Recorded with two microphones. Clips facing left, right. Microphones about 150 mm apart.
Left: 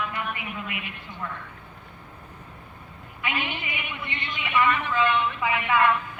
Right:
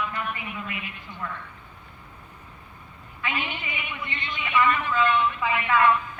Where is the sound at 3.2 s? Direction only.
15° left (ahead or behind).